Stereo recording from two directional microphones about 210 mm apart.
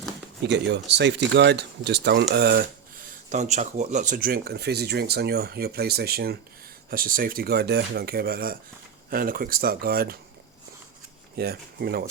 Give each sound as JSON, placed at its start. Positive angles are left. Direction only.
{"t": 0.4, "sound": "speech", "side_deg": -55}
{"t": 3.2, "sound": "speech", "side_deg": -35}
{"t": 11.3, "sound": "speech", "side_deg": -45}